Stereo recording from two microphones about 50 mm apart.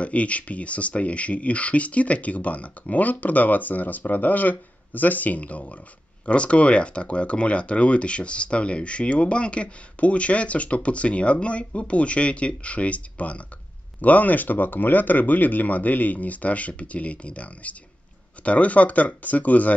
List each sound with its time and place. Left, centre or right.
0.0 s speech: left